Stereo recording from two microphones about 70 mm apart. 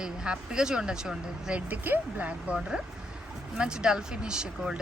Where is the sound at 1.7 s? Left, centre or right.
Right.